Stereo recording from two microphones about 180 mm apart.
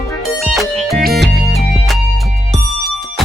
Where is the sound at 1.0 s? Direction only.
60° right (ahead or behind).